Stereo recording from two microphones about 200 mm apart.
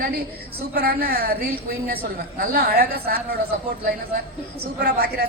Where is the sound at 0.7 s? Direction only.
50° right (ahead or behind).